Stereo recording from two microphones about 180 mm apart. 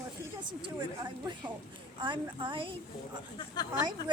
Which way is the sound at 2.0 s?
25° right (ahead or behind).